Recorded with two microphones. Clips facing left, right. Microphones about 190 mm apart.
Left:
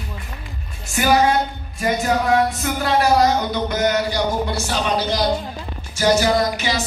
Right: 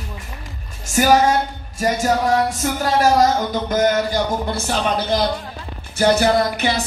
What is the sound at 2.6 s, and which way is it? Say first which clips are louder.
Speech: right 1 dB; 40° right (ahead or behind).